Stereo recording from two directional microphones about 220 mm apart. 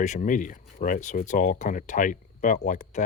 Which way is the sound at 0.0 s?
35° left (ahead or behind).